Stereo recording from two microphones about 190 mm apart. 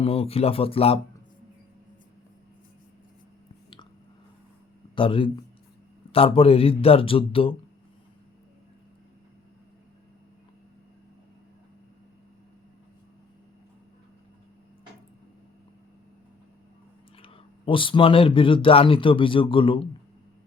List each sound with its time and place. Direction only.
0.0 s speech: 30° left (ahead or behind)
4.9 s speech: 25° left (ahead or behind)
17.2 s speech: 25° left (ahead or behind)